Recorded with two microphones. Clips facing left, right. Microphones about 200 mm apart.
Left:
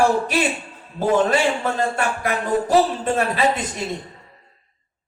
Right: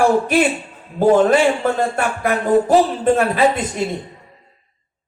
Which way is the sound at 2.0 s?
55° right (ahead or behind).